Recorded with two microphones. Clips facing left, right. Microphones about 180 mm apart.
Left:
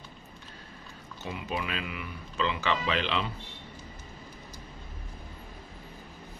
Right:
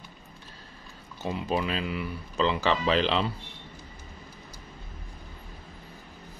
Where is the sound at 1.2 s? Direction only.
35° right (ahead or behind).